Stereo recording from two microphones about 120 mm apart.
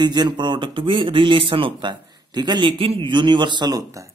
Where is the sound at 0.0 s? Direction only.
35° right (ahead or behind).